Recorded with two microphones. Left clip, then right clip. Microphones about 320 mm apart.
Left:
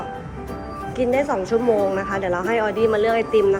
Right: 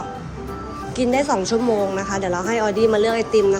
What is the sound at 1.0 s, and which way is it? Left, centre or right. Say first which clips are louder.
Speech: right 1 dB; centre.